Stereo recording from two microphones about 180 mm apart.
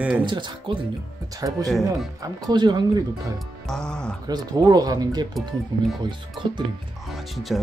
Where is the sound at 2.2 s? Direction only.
25° right (ahead or behind).